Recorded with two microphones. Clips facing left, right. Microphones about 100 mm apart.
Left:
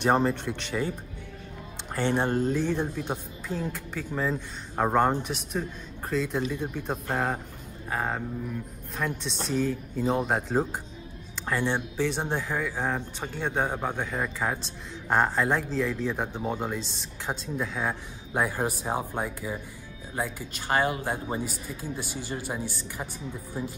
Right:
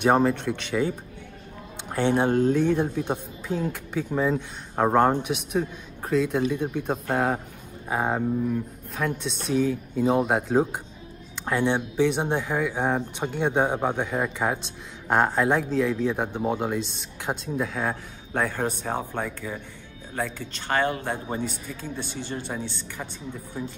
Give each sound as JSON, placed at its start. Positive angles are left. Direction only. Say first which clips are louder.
{"t": 0.0, "sound": "a man's voice", "louder": "right 3 dB", "side_deg": -5}
{"t": 1.9, "sound": "speech", "louder": "right 4 dB", "side_deg": -10}
{"t": 2.3, "sound": "a man's voice", "louder": "right 5 dB", "side_deg": 5}
{"t": 2.6, "sound": "a man's voice", "louder": "right 5 dB", "side_deg": -10}